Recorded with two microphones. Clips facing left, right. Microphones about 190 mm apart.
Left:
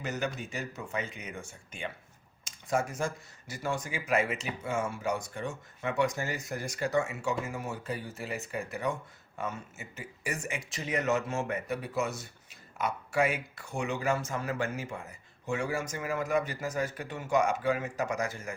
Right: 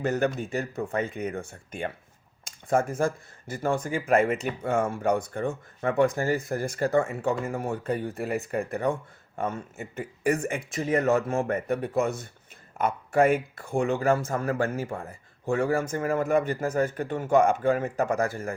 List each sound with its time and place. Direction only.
0.0 s speech: 55° right (ahead or behind)